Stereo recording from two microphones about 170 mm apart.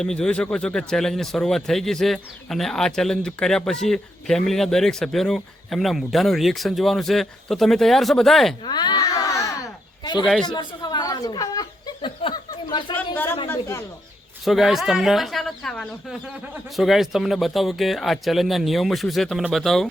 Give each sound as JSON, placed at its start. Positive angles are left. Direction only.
{"t": 0.0, "sound": "speech", "side_deg": 5}
{"t": 8.6, "sound": "a sound", "side_deg": 25}
{"t": 13.5, "sound": "speech", "side_deg": 15}
{"t": 14.4, "sound": "speech", "side_deg": 0}